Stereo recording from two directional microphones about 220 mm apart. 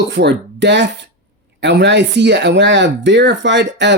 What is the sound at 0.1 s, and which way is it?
Speech, 50° right (ahead or behind).